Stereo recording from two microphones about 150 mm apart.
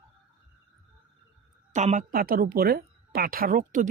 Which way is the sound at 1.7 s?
50° right (ahead or behind).